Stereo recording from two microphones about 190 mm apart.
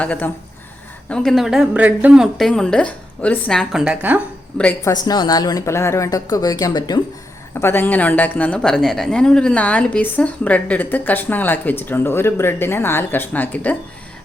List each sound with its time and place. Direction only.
0.0 s a woman's voice: 5° left (ahead or behind)
4.5 s a woman's voice: 10° left (ahead or behind)
4.9 s a woman's voice: 20° left (ahead or behind)